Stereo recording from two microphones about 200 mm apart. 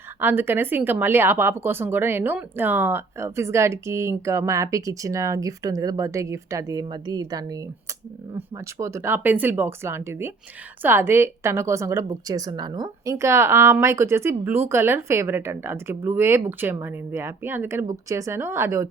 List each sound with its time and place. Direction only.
0.2 s a woman's voice: 10° right (ahead or behind)